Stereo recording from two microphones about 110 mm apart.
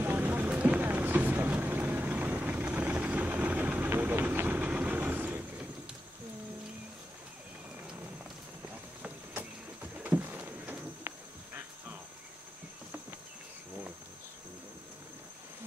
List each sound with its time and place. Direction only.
0.0 s vehicle: 15° right (ahead or behind)
9.0 s vehicle: 15° right (ahead or behind)
9.9 s a sound: 15° right (ahead or behind)